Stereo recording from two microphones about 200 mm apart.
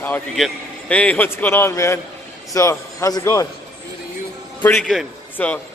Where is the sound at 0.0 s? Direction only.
5° left (ahead or behind).